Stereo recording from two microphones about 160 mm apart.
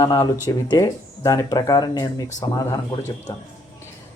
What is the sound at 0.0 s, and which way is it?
Speech, 20° left (ahead or behind).